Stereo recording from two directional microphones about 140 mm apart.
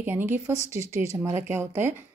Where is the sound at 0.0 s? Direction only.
15° right (ahead or behind).